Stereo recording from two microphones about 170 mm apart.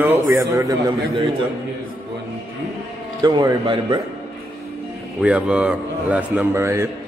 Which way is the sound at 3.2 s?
25° right (ahead or behind).